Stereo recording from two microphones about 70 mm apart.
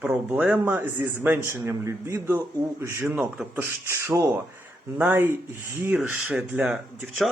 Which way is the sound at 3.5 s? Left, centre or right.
Right.